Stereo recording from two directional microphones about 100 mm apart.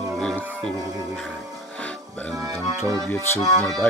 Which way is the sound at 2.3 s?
40° right (ahead or behind).